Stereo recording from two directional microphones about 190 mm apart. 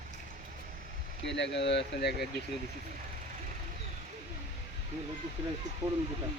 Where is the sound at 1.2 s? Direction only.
65° left (ahead or behind).